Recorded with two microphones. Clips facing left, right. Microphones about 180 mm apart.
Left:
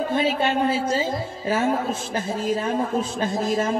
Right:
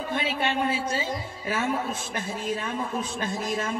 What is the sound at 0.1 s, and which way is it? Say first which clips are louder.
A man's voice: left 4 dB; 30° left (ahead or behind).